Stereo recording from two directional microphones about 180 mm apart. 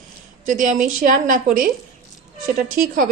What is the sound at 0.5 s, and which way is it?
A woman's voice, 45° right (ahead or behind).